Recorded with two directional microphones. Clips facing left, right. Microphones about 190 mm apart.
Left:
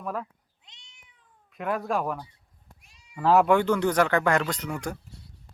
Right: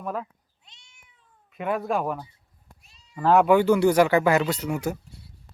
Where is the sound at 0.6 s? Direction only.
20° left (ahead or behind).